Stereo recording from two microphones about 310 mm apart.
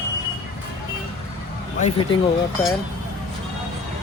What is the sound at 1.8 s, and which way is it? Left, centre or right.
Speech, centre.